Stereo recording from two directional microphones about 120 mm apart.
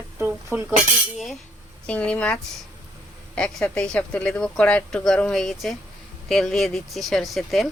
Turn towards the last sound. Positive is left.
turn(degrees=0)  # may be behind; listen again after turning